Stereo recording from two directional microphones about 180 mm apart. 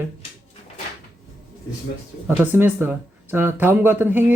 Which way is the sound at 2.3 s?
10° right (ahead or behind).